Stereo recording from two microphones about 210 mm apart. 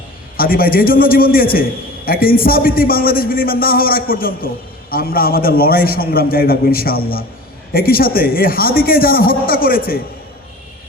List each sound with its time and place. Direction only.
0.3 s a man's voice: 45° left (ahead or behind)